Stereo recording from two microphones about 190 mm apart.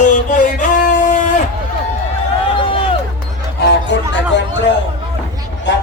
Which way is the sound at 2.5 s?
25° left (ahead or behind).